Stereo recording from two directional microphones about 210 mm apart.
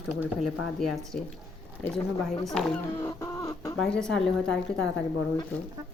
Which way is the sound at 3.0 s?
15° left (ahead or behind).